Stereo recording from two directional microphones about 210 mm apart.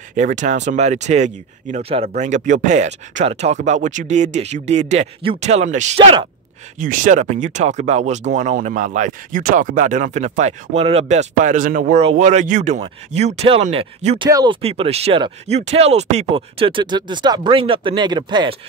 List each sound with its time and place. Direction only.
0.1 s speech: 35° right (ahead or behind); by 18.6 s 20° right (ahead or behind)